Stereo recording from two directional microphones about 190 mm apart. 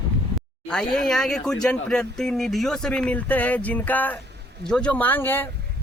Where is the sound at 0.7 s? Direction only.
5° left (ahead or behind).